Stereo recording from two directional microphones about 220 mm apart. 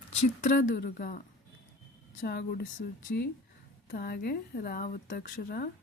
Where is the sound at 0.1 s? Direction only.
35° left (ahead or behind).